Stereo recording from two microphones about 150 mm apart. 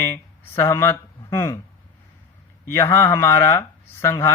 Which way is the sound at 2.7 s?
20° left (ahead or behind).